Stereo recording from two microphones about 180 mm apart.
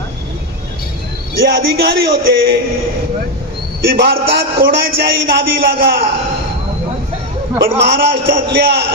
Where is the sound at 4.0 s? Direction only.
65° right (ahead or behind).